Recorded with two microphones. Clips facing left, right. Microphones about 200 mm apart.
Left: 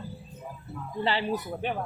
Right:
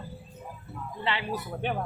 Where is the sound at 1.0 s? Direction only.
35° left (ahead or behind).